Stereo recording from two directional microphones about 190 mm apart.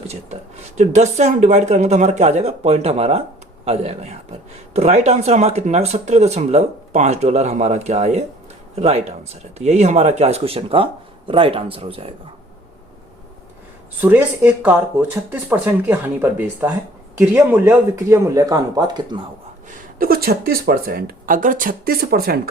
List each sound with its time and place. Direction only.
0.8 s speech: 35° right (ahead or behind)
14.0 s speech: 10° right (ahead or behind)
19.7 s speech: 50° right (ahead or behind)